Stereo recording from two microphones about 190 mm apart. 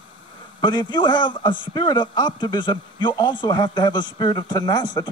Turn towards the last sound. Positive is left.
turn(degrees=20)  # may be behind; listen again after turning